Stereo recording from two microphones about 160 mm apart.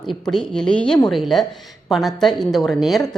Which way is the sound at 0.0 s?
Centre (ahead or behind).